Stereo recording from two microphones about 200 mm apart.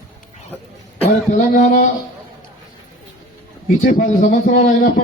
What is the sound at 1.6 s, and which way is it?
Speech, 40° left (ahead or behind).